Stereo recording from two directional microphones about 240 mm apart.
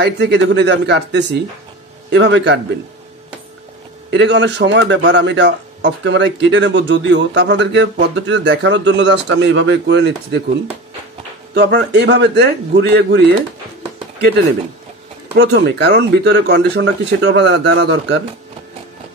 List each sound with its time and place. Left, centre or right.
0.0 s a man's voice: right
4.1 s a man's voice: right
11.5 s a man's voice: right
15.3 s a man's voice: right